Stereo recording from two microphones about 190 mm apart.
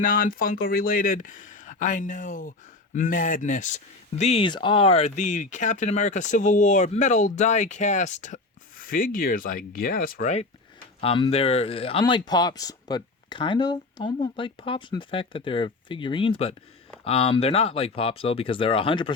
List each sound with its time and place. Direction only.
0.0 s speech: 45° left (ahead or behind)
4.2 s speech: 30° left (ahead or behind)
11.0 s speech: 30° left (ahead or behind)